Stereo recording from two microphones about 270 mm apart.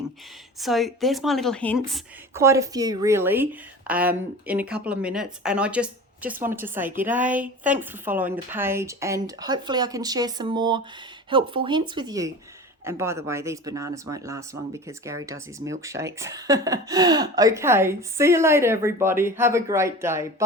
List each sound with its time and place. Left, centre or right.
0.6 s a woman's voice: centre
2.3 s speech: centre